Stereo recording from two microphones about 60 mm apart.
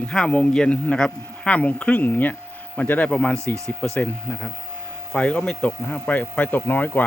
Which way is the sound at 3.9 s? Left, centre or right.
Left.